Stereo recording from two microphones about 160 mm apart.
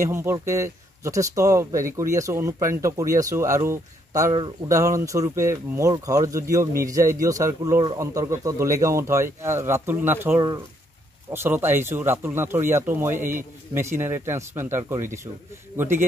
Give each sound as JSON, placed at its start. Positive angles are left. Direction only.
{"t": 0.0, "sound": "speech", "side_deg": -15}